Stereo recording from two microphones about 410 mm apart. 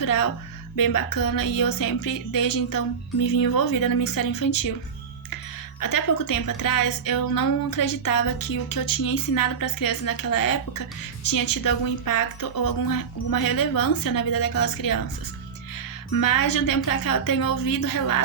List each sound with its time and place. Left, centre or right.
0.0 s speech: left
5.8 s speech: left
16.1 s speech: left